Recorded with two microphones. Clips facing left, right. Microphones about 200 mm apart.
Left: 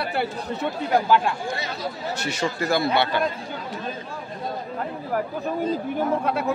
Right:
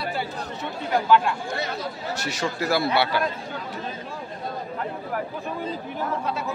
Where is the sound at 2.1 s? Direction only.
Centre (ahead or behind).